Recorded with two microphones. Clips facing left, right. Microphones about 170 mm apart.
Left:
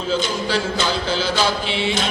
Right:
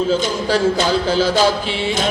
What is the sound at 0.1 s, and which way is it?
Music, 45° right (ahead or behind).